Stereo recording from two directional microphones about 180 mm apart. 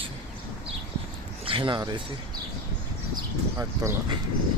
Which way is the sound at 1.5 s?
25° right (ahead or behind).